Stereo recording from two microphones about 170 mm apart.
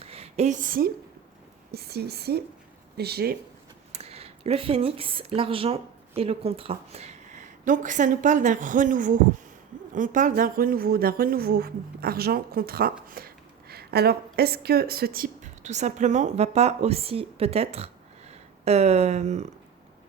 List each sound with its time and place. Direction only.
0.0 s a sound: 35° right (ahead or behind); by 0.9 s 55° right (ahead or behind)
1.7 s speech: 70° right (ahead or behind)
3.9 s speech: 35° right (ahead or behind)